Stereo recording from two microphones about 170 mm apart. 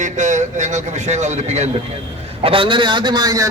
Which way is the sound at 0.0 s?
45° right (ahead or behind).